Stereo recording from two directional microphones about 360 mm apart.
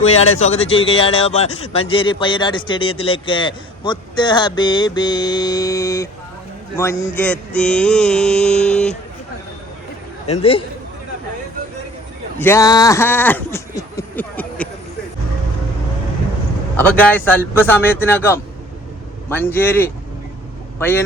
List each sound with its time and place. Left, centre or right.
0.2 s speech: centre
7.2 s a sound: centre
10.2 s speech: centre
12.4 s speech: centre
16.7 s a sound: centre
20.7 s speech: centre